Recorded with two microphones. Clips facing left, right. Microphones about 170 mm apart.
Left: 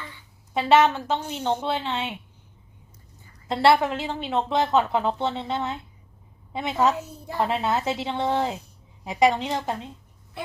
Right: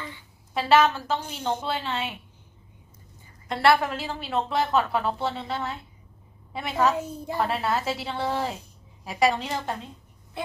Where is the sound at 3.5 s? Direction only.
25° left (ahead or behind).